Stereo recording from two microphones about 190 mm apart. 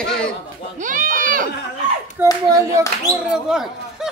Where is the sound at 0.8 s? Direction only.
45° right (ahead or behind).